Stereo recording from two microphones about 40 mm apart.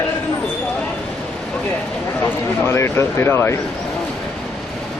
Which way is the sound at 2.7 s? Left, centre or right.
Left.